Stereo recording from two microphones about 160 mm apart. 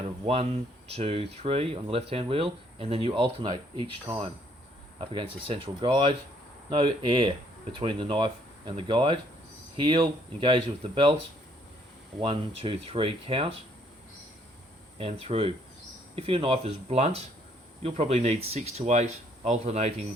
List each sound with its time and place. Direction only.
0.3 s speech: 35° right (ahead or behind)
5.1 s speech: 35° right (ahead or behind)
12.2 s speech: 35° right (ahead or behind)
14.9 s speech: 35° right (ahead or behind)